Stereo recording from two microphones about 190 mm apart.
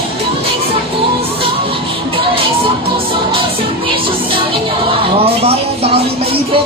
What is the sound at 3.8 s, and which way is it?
Music, 25° right (ahead or behind).